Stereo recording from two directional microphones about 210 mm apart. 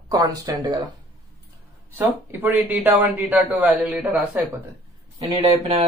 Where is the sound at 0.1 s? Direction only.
15° right (ahead or behind).